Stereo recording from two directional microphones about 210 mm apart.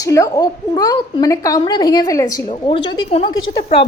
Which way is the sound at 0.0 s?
15° left (ahead or behind).